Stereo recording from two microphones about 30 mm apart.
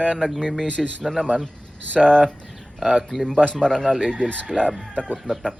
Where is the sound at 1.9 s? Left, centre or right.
Left.